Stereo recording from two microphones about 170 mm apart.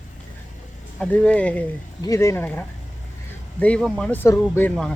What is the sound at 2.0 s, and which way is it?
Speech, 20° left (ahead or behind).